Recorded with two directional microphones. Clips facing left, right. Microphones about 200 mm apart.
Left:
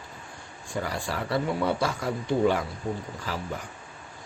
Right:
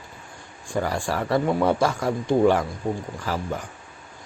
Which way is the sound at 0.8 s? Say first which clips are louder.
Right 6 dB; 45° right (ahead or behind).